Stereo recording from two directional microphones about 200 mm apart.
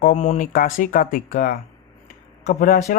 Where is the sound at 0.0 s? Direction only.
40° left (ahead or behind).